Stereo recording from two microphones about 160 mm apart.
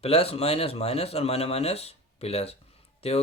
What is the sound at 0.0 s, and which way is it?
Speech, 40° left (ahead or behind).